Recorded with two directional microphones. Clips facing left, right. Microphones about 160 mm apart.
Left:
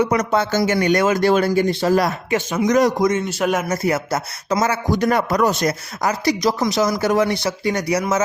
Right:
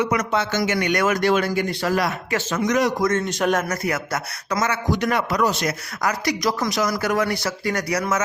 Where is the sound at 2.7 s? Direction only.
40° left (ahead or behind).